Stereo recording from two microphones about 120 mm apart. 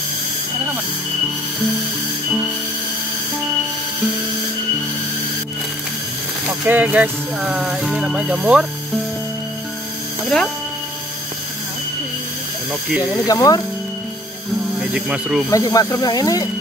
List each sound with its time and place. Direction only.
6.4 s music: 10° right (ahead or behind)
13.3 s speech: 30° left (ahead or behind)
14.8 s speech: 5° right (ahead or behind)
15.5 s speech: 30° left (ahead or behind)